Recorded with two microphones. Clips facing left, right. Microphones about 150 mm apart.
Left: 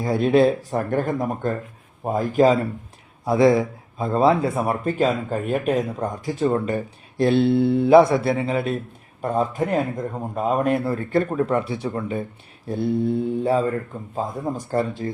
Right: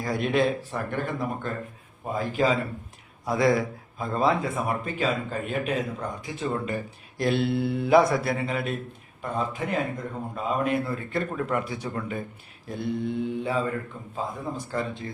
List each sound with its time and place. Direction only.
0.0 s speech: 30° left (ahead or behind); by 2.6 s 45° left (ahead or behind)
3.2 s a man's voice: 25° left (ahead or behind)
4.5 s a man's voice: 40° left (ahead or behind)